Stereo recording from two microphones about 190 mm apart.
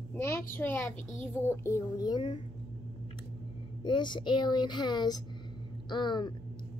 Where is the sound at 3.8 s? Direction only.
25° left (ahead or behind).